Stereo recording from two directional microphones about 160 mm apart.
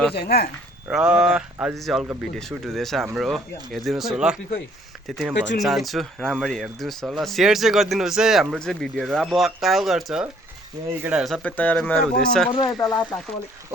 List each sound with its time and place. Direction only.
0.1 s speech: 85° left
0.9 s speech: 5° right (ahead or behind)
11.4 s speech: 10° left (ahead or behind)
12.5 s speech: 25° left (ahead or behind)